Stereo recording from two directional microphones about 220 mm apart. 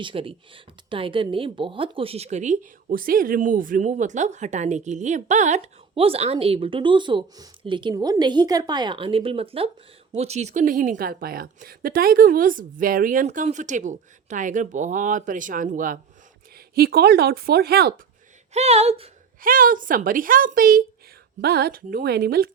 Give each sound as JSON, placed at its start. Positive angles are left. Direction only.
{"t": 0.0, "sound": "a woman's voice", "side_deg": -25}
{"t": 18.5, "sound": "speech", "side_deg": -30}
{"t": 19.4, "sound": "a woman's voice", "side_deg": -40}